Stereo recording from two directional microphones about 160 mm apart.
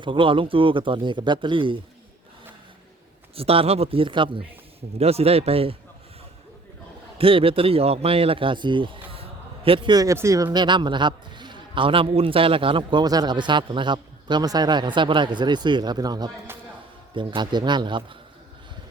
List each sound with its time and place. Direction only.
0.0 s speech: 30° right (ahead or behind)
3.3 s speech: 35° right (ahead or behind)
7.2 s a man's voice: 35° right (ahead or behind)